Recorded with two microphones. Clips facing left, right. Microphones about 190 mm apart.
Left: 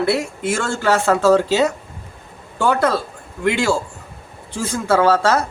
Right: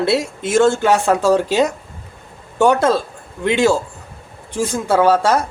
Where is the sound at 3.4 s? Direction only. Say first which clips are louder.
Right 3 dB; 20° right (ahead or behind).